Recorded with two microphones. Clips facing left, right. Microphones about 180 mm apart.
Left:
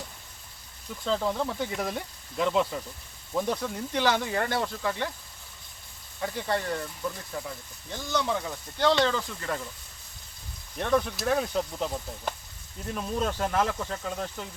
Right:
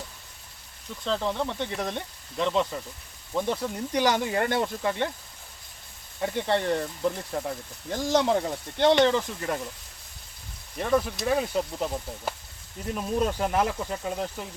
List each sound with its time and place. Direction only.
1.0 s speech: 5° left (ahead or behind)
3.9 s speech: 15° right (ahead or behind)
6.2 s speech: 25° right (ahead or behind)
7.3 s speech: 45° right (ahead or behind)
8.8 s speech: 20° right (ahead or behind)
10.8 s speech: 5° right (ahead or behind)